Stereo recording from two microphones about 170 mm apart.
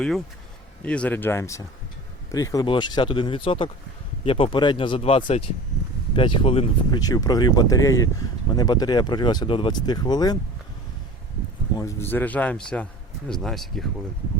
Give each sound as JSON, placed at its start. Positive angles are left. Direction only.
{"t": 0.9, "sound": "a man's voice", "side_deg": 5}
{"t": 11.8, "sound": "a man's voice", "side_deg": 15}